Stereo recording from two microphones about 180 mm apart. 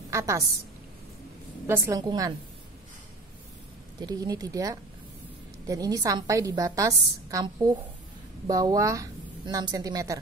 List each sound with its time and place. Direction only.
0.1 s a woman's voice: 15° right (ahead or behind)
1.7 s a woman's voice: 15° right (ahead or behind)
4.0 s a woman's voice: 20° right (ahead or behind)